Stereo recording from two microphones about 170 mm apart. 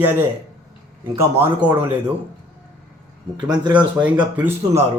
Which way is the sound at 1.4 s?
10° right (ahead or behind).